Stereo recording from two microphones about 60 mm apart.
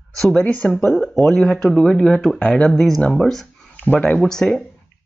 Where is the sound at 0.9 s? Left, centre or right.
Centre.